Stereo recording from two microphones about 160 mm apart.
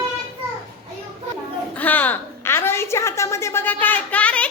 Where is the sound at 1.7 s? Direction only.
10° left (ahead or behind).